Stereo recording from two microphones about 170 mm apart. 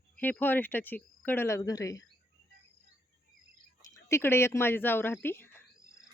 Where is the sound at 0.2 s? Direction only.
10° left (ahead or behind).